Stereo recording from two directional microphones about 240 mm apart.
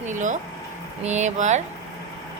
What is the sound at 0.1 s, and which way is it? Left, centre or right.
Speech, right.